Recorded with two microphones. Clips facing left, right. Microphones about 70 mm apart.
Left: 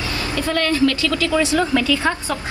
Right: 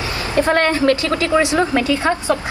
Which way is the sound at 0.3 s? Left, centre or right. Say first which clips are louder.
Right 6 dB; right.